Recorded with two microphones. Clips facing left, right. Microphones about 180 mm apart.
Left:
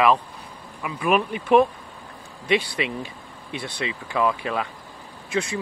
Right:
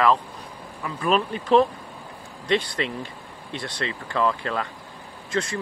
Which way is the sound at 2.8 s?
10° left (ahead or behind).